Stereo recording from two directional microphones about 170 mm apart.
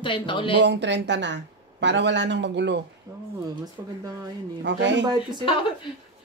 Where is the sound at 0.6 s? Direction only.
90° right.